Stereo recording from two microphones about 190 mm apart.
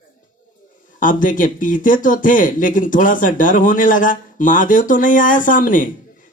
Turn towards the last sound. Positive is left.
turn(degrees=45)  # may be behind; listen again after turning